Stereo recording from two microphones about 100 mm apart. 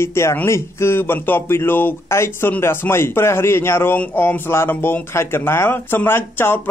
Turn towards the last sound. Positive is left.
turn(degrees=20)  # may be behind; listen again after turning